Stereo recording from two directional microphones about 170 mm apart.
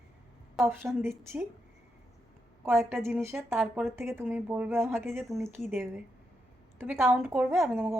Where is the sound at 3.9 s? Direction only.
15° right (ahead or behind).